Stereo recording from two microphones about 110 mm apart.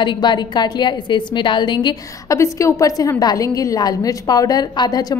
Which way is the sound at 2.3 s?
25° left (ahead or behind).